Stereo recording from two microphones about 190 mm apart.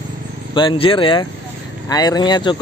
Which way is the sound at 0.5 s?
25° left (ahead or behind).